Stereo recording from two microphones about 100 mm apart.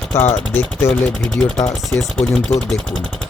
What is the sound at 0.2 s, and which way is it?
Speech, 20° left (ahead or behind).